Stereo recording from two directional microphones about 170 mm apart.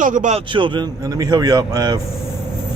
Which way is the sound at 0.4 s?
30° right (ahead or behind).